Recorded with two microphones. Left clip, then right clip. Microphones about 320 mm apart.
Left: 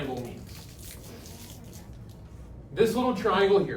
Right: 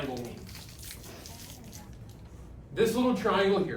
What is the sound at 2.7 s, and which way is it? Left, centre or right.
Speech, centre.